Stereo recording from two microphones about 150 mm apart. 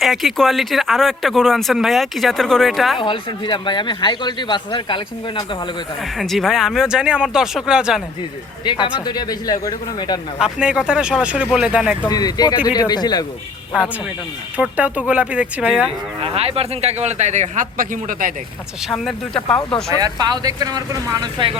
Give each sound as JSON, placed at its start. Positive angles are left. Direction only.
{"t": 0.0, "sound": "speech", "side_deg": 0}
{"t": 3.0, "sound": "a man's voice", "side_deg": 35}
{"t": 6.0, "sound": "speech", "side_deg": 0}
{"t": 8.6, "sound": "speech", "side_deg": 30}
{"t": 10.4, "sound": "speech", "side_deg": -5}
{"t": 12.0, "sound": "speech", "side_deg": 25}
{"t": 14.5, "sound": "speech", "side_deg": -10}
{"t": 16.2, "sound": "speech", "side_deg": -40}
{"t": 18.9, "sound": "speech", "side_deg": 0}
{"t": 20.0, "sound": "speech", "side_deg": -25}